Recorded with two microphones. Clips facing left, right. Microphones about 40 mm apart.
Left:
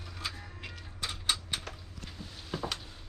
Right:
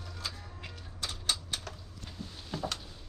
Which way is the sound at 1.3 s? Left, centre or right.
Centre.